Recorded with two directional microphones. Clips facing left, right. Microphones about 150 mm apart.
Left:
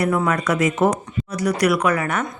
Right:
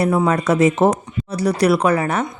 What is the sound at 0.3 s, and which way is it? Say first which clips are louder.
Speech: right 4 dB; 30° right (ahead or behind).